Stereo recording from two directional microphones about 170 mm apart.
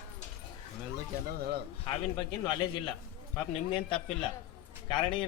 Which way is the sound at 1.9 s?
25° left (ahead or behind).